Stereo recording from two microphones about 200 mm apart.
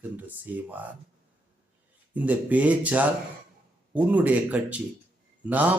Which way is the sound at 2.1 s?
5° right (ahead or behind).